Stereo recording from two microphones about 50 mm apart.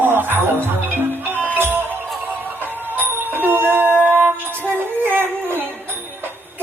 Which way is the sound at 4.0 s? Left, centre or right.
Right.